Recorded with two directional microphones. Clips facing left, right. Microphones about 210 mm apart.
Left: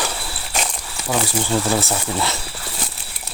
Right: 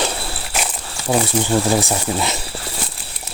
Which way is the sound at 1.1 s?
15° right (ahead or behind).